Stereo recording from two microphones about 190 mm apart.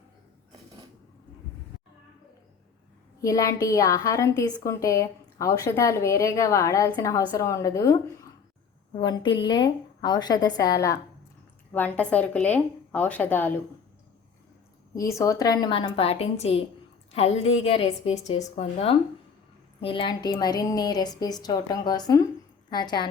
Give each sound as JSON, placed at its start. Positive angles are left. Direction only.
{"t": 3.2, "sound": "a woman's voice", "side_deg": 15}
{"t": 15.0, "sound": "a woman's voice", "side_deg": 15}